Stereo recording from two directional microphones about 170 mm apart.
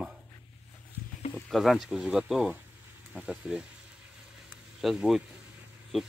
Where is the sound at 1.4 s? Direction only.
Centre (ahead or behind).